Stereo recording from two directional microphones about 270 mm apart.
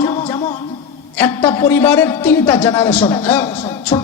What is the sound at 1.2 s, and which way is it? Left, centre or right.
A man's voice, centre.